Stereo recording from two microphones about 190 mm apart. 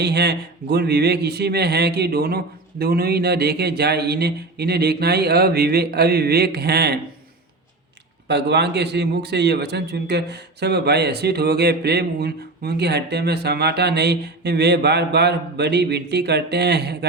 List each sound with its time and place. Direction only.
0.0 s a man's voice: 60° right (ahead or behind)
8.3 s a man's voice: 65° right (ahead or behind)